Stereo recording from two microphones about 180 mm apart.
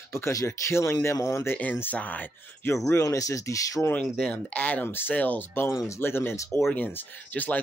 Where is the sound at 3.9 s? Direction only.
5° left (ahead or behind).